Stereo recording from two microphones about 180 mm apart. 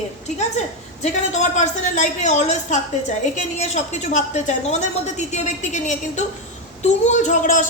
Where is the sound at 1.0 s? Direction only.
40° left (ahead or behind).